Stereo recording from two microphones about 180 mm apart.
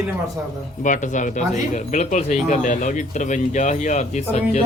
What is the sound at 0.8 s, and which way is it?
Speech, 45° left (ahead or behind).